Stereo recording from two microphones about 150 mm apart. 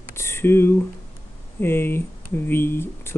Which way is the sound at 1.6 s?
15° left (ahead or behind).